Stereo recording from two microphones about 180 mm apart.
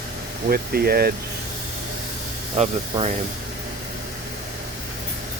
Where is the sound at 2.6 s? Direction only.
35° right (ahead or behind).